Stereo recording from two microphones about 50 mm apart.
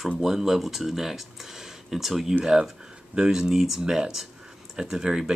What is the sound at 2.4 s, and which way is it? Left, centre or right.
Speech, centre.